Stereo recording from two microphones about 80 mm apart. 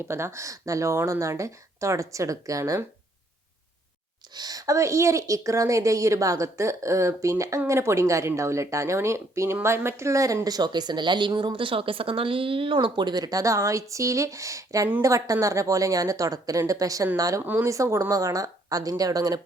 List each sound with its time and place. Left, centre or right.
0.1 s speech: right
4.4 s a woman's voice: right
18.1 s a woman's voice: right